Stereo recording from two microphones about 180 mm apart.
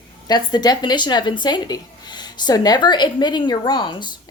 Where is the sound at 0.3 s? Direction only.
25° left (ahead or behind).